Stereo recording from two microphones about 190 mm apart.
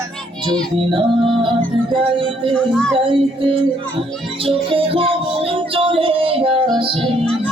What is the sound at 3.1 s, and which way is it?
Music, 25° right (ahead or behind).